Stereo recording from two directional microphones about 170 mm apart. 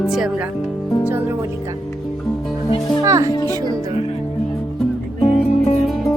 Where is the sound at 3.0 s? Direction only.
20° right (ahead or behind).